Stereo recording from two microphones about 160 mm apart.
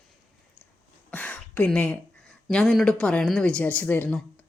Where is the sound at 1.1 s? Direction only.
10° left (ahead or behind).